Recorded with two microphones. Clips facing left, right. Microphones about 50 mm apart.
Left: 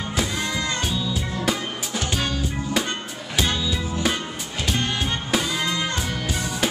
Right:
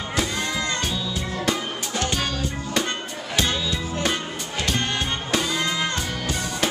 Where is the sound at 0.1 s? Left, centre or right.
Centre.